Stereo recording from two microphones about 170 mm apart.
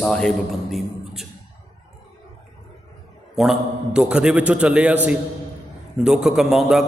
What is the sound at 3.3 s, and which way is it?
A man's voice, centre (ahead or behind).